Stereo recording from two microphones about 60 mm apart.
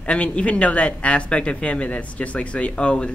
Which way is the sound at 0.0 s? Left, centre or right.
Left.